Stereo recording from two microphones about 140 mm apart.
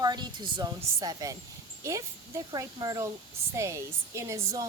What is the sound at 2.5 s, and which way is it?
Speech, 30° right (ahead or behind).